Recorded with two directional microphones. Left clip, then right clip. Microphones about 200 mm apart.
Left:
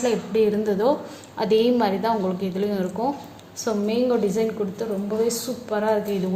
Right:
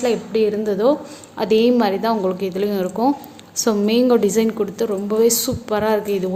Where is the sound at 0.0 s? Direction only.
20° right (ahead or behind); by 6.1 s 35° right (ahead or behind).